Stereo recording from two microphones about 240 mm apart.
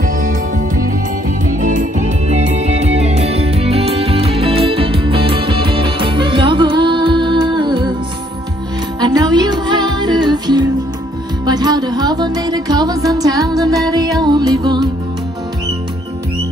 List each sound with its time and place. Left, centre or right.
0.0 s music: right
2.2 s music: right
9.0 s music: centre